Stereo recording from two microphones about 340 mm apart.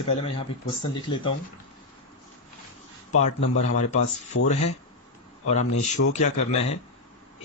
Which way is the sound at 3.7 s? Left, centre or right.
Left.